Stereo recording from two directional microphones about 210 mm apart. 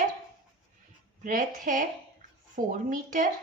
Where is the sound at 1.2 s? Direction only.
40° right (ahead or behind).